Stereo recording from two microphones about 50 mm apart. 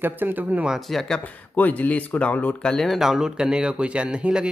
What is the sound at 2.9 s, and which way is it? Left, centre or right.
Speech, centre.